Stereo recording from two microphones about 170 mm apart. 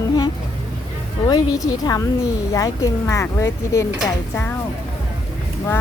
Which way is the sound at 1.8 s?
20° left (ahead or behind).